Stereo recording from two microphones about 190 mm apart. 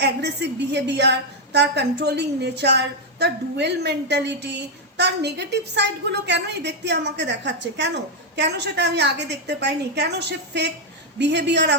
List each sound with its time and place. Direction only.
0.0 s a woman's voice: 65° right (ahead or behind)